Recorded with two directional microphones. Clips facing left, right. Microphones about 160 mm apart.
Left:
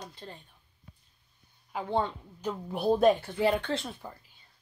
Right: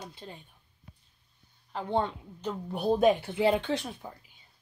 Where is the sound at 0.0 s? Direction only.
5° right (ahead or behind).